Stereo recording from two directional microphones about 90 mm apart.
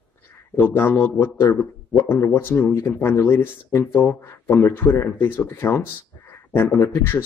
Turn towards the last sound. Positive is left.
turn(degrees=25)  # may be behind; listen again after turning